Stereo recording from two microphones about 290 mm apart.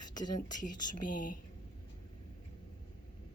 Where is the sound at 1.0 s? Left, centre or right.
Left.